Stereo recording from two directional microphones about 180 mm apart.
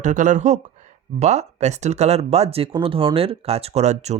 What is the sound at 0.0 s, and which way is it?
Speech, 45° right (ahead or behind).